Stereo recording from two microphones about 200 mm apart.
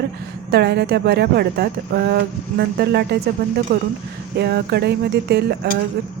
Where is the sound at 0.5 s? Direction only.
55° right (ahead or behind).